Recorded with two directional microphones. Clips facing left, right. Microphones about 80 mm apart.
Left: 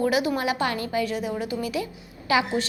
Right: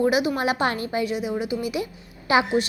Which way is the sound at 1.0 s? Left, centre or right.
Centre.